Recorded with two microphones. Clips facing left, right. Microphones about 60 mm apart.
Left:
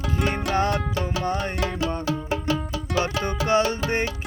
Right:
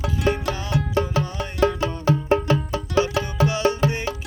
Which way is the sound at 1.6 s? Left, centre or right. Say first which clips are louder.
Right 4 dB; right.